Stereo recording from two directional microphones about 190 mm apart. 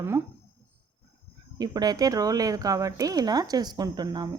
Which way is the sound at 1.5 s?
20° right (ahead or behind).